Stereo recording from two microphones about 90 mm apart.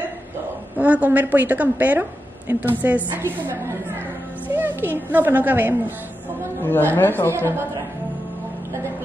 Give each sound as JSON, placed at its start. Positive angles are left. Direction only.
{"t": 0.7, "sound": "a woman's voice", "side_deg": -15}
{"t": 4.5, "sound": "a woman's voice", "side_deg": -20}
{"t": 6.6, "sound": "a woman's voice", "side_deg": 20}
{"t": 7.3, "sound": "a woman's voice", "side_deg": -25}